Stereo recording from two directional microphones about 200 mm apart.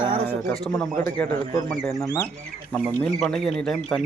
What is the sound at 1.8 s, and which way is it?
Speech, centre (ahead or behind).